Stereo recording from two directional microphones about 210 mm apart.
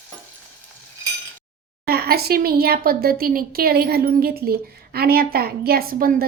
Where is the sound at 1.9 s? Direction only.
45° right (ahead or behind).